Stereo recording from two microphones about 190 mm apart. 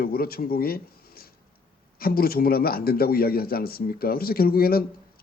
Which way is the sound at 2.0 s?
50° left (ahead or behind).